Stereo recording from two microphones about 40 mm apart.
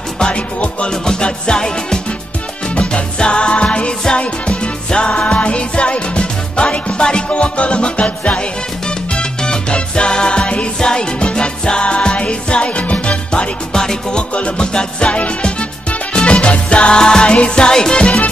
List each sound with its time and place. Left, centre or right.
0.2 s music: left
1.0 s music: centre
8.8 s music: left
13.7 s music: centre
14.3 s music: left